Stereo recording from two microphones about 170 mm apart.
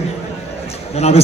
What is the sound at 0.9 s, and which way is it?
Speech, 40° left (ahead or behind).